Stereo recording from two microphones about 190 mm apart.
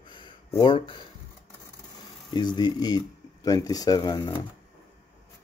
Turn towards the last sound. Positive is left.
turn(degrees=20)  # may be behind; listen again after turning